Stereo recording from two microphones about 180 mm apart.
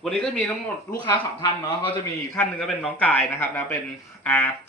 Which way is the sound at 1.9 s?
10° left (ahead or behind).